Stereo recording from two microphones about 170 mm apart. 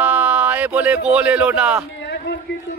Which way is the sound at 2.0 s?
85° left.